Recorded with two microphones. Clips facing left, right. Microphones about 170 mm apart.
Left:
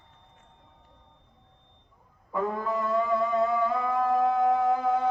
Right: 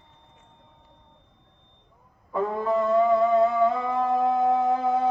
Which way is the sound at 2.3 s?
25° right (ahead or behind).